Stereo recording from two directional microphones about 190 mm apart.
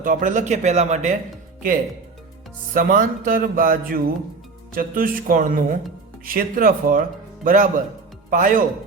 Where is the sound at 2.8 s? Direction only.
45° right (ahead or behind).